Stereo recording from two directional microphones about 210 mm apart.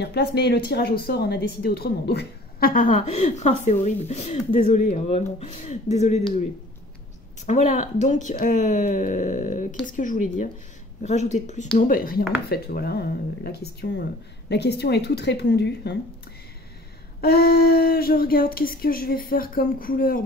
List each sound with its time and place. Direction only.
0.0 s speech: 50° left (ahead or behind); by 6.2 s 35° left (ahead or behind)
7.4 s speech: 35° left (ahead or behind); by 16.0 s 55° left (ahead or behind)
17.2 s speech: 45° left (ahead or behind)